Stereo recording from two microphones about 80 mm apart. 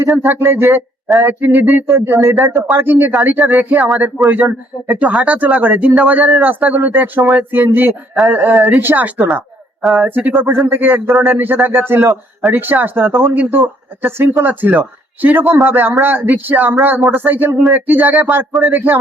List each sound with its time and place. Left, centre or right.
0.2 s speech: right
2.0 s speech: right
9.1 s a woman's voice: centre
11.1 s speech: centre
11.3 s speech: right